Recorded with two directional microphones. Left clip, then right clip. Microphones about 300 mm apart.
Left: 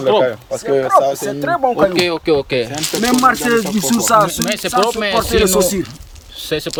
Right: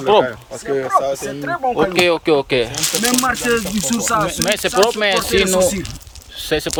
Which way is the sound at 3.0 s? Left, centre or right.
Centre.